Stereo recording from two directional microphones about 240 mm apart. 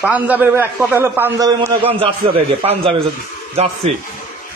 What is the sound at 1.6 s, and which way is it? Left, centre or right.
A man's voice, right.